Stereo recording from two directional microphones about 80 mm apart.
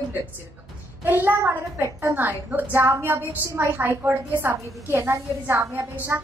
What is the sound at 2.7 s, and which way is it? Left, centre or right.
A woman's voice, right.